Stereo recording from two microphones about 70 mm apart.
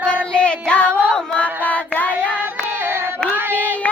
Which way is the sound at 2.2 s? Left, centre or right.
Right.